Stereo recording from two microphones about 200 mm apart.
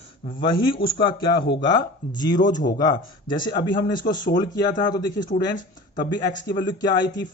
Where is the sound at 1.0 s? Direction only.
20° left (ahead or behind).